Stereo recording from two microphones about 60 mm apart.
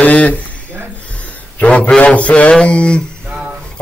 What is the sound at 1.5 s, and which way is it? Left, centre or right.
Speech, left.